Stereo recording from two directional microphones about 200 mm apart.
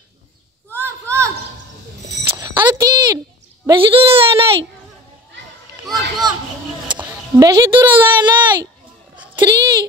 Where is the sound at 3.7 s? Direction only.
25° right (ahead or behind).